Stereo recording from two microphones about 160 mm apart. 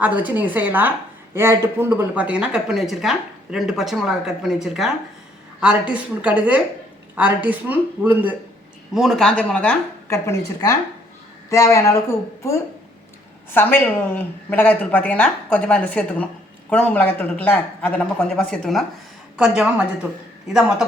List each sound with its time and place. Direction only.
0.2 s a woman's voice: 10° right (ahead or behind)
9.0 s a woman's voice: centre (ahead or behind)